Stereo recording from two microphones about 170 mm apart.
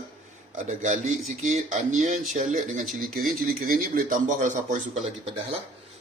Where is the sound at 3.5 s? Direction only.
60° right (ahead or behind).